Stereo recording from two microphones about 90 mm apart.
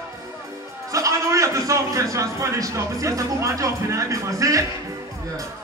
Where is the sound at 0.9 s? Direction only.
35° right (ahead or behind).